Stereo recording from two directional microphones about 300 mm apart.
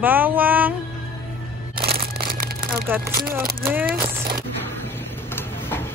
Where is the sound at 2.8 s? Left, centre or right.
Centre.